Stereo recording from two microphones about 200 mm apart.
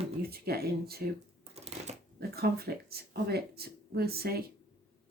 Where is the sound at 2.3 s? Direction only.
50° right (ahead or behind).